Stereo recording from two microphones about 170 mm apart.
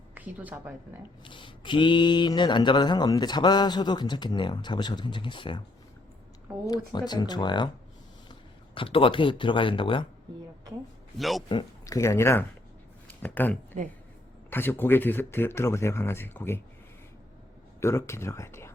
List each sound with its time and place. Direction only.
0.1 s a woman's voice: 10° right (ahead or behind)
1.2 s speech: 30° left (ahead or behind)
6.7 s speech: 25° left (ahead or behind)
11.2 s a man's voice: centre (ahead or behind)
11.4 s speech: 25° left (ahead or behind)
17.7 s speech: 15° left (ahead or behind)